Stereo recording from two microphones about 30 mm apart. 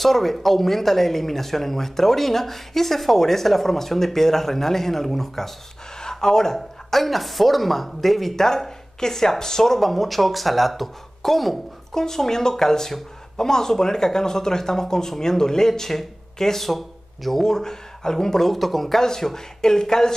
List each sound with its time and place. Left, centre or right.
0.0 s speech: centre
11.9 s speech: centre
17.4 s speech: centre
18.5 s speech: centre
18.9 s speech: centre